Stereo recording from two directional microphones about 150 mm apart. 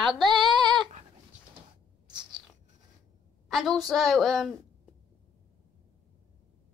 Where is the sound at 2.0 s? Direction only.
30° right (ahead or behind).